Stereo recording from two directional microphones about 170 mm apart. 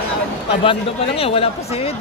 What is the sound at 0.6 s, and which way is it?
Speech, 30° left (ahead or behind).